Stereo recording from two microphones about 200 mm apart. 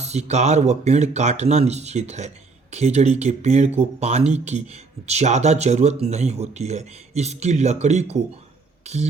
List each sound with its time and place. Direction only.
0.0 s speech: 35° right (ahead or behind)